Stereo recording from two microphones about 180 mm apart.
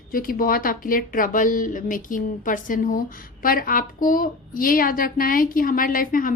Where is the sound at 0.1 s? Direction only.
50° left (ahead or behind).